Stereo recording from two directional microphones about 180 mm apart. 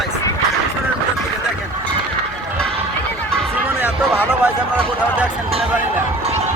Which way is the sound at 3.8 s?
10° right (ahead or behind).